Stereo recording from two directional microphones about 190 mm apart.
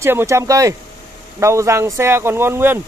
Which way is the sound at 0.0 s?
15° right (ahead or behind).